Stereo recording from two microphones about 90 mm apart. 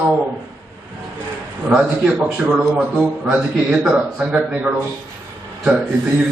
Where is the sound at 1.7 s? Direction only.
10° right (ahead or behind).